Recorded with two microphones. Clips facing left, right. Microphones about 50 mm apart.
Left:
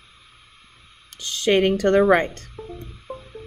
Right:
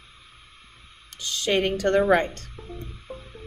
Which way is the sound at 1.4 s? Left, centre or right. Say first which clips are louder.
Left 5 dB; left.